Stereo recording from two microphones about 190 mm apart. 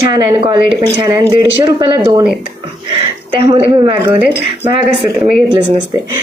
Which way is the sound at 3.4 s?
25° right (ahead or behind).